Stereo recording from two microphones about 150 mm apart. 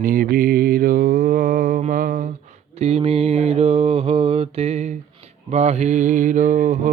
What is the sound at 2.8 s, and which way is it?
Mantra, 45° right (ahead or behind).